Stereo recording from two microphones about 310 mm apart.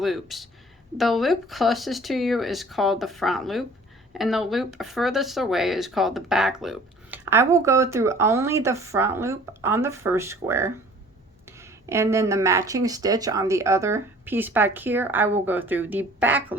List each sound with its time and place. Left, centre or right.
0.0 s speech: centre